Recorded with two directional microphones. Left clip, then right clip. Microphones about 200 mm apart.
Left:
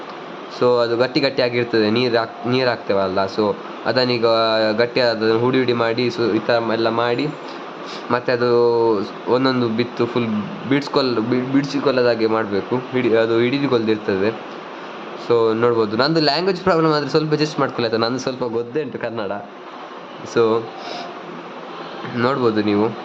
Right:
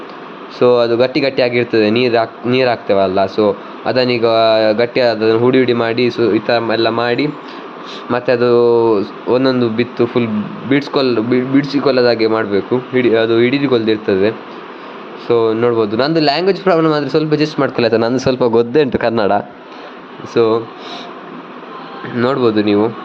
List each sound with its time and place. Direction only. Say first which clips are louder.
0.6 s speech: right 5 dB; 10° right (ahead or behind)
17.7 s a man's voice: right 6 dB; 20° right (ahead or behind)
20.3 s speech: right 4 dB; 10° right (ahead or behind)
22.2 s speech: right 4 dB; 10° right (ahead or behind)